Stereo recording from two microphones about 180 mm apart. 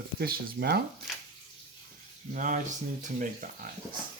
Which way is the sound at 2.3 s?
45° right (ahead or behind).